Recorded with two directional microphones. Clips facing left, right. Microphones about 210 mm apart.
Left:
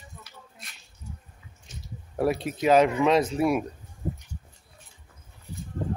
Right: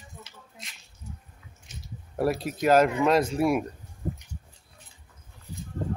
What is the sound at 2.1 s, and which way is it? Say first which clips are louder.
Speech: left 1 dB; centre (ahead or behind).